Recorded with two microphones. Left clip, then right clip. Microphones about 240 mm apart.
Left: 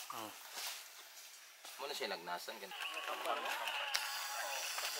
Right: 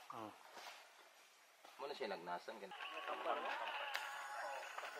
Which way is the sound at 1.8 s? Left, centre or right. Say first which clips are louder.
Left 4 dB; centre.